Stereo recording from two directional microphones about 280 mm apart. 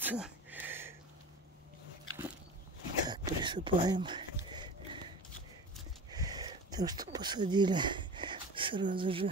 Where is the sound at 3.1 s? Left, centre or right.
Centre.